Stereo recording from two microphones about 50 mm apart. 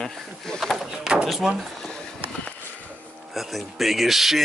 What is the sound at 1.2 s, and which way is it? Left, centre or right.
Speech, centre.